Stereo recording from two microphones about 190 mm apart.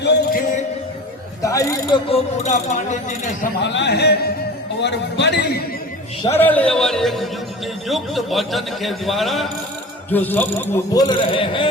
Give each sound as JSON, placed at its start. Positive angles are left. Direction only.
{"t": 0.0, "sound": "music", "side_deg": 65}
{"t": 1.4, "sound": "speech", "side_deg": 15}
{"t": 2.0, "sound": "speech", "side_deg": 35}
{"t": 3.4, "sound": "speech", "side_deg": 65}
{"t": 6.2, "sound": "a man's voice", "side_deg": 10}
{"t": 11.3, "sound": "a man's voice", "side_deg": 25}